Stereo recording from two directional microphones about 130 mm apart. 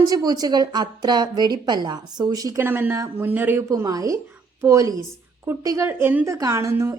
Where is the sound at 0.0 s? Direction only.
30° right (ahead or behind).